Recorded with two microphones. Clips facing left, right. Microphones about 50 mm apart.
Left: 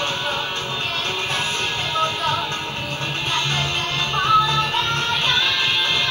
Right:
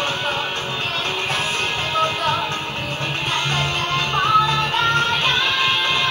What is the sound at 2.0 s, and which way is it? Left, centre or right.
Music, right.